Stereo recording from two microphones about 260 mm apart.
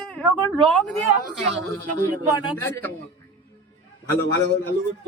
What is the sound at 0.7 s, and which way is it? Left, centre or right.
Speech, centre.